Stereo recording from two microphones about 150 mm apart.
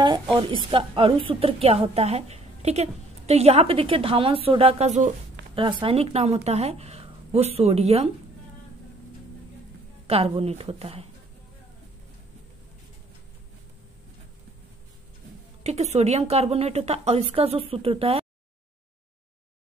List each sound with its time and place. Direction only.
0.0 s a woman's voice: 30° right (ahead or behind); by 5.6 s 50° right (ahead or behind)
5.6 s a woman's voice: 35° right (ahead or behind)
10.0 s a woman's voice: 40° right (ahead or behind)
15.6 s a woman's voice: 45° right (ahead or behind)